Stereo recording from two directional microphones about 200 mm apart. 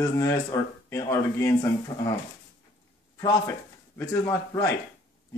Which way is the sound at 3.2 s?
15° left (ahead or behind).